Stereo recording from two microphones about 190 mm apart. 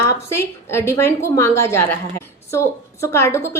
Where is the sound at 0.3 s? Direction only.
15° left (ahead or behind).